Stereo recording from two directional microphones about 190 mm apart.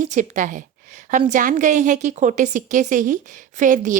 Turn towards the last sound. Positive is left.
turn(degrees=-40)  # may be behind; listen again after turning